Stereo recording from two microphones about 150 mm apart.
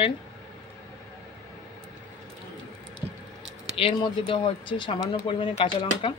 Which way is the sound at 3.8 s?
35° left (ahead or behind).